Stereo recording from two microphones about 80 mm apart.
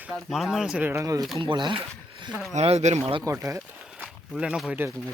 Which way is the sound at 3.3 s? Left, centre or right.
Right.